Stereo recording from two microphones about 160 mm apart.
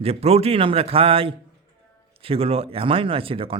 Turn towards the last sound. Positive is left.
turn(degrees=-35)  # may be behind; listen again after turning